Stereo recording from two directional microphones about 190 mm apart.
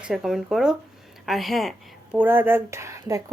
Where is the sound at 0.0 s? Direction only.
Centre (ahead or behind).